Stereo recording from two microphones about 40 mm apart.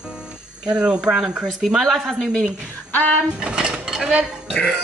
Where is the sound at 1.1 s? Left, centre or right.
Centre.